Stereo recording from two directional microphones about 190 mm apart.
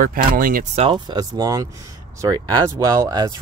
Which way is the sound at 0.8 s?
25° right (ahead or behind).